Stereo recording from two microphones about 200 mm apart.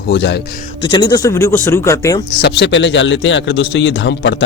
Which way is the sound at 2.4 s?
55° left (ahead or behind).